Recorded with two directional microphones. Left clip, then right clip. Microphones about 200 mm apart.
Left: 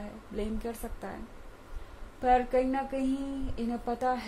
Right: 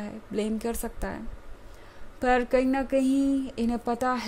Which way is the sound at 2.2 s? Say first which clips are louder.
Right 2 dB; 45° right (ahead or behind).